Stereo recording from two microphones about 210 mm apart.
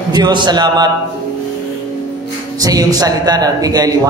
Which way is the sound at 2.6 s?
15° right (ahead or behind).